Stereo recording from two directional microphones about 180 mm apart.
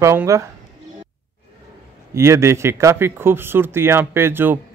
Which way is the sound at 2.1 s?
15° right (ahead or behind).